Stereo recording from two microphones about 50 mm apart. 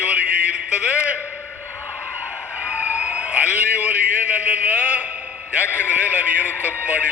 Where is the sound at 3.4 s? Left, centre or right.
Left.